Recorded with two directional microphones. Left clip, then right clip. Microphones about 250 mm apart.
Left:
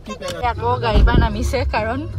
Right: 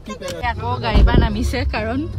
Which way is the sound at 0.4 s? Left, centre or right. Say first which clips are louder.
Left 4 dB; centre.